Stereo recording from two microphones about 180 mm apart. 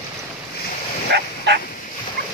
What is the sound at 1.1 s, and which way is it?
Fowl, 70° right (ahead or behind).